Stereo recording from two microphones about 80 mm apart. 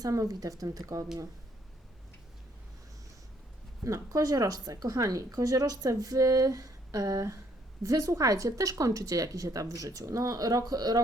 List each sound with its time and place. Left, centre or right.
0.0 s speech: right
3.8 s speech: right